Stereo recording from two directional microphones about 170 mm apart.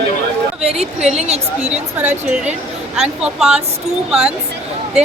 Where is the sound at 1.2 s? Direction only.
40° right (ahead or behind).